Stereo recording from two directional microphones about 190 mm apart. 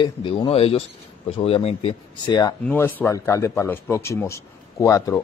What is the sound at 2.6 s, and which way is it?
A man's voice, 10° left (ahead or behind).